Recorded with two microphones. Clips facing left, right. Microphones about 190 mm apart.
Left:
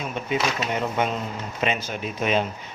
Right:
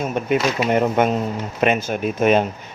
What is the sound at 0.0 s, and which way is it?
A man's voice, 50° right (ahead or behind).